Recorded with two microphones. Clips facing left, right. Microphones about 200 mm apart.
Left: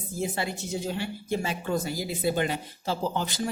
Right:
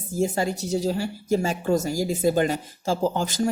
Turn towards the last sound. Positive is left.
turn(degrees=-45)  # may be behind; listen again after turning